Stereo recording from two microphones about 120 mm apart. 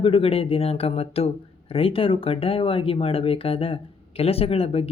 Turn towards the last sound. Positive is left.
turn(degrees=55)  # may be behind; listen again after turning